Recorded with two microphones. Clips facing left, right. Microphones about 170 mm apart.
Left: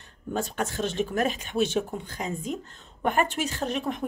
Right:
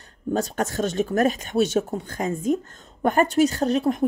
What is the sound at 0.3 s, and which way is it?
Speech, 40° right (ahead or behind).